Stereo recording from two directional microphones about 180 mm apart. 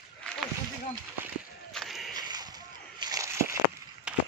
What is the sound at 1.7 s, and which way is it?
Battle cry, centre (ahead or behind).